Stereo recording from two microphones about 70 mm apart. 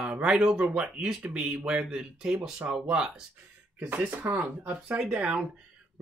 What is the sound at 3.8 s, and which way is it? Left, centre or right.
Speech, right.